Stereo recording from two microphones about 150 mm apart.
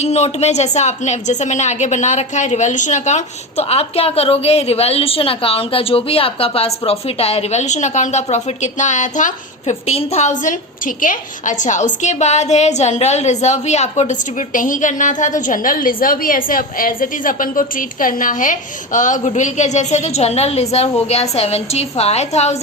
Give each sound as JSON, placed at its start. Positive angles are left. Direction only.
{"t": 0.0, "sound": "a woman's voice", "side_deg": 45}